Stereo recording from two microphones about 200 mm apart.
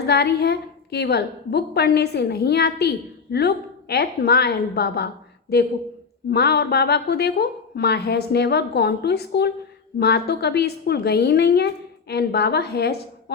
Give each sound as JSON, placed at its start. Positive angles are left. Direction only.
{"t": 0.0, "sound": "a woman's voice", "side_deg": 55}